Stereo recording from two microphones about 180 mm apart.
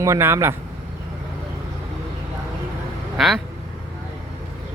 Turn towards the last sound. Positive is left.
turn(degrees=0)  # may be behind; listen again after turning